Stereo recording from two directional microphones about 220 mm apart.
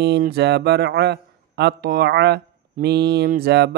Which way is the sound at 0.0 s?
45° right (ahead or behind).